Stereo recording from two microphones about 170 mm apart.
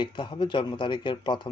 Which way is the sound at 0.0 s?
30° left (ahead or behind).